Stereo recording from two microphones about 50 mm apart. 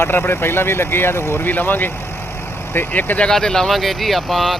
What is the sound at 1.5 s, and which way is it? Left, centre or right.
Speech, left.